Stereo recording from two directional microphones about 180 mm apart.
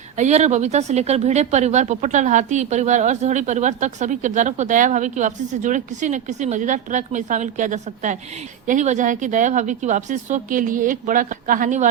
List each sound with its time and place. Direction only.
0.2 s speech: 40° right (ahead or behind)